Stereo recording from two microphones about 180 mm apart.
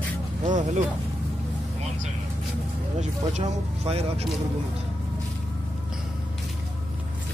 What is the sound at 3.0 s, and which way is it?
Speech, 40° right (ahead or behind).